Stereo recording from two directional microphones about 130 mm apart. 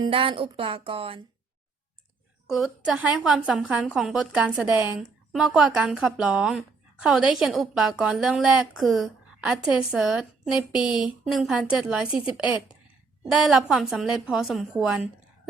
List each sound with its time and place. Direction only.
0.0 s speech: 45° right (ahead or behind)
2.5 s a woman's voice: 5° right (ahead or behind)
10.8 s speech: 35° left (ahead or behind)
11.3 s speech: 5° right (ahead or behind)